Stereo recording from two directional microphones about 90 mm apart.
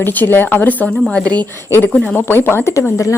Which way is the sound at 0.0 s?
20° left (ahead or behind).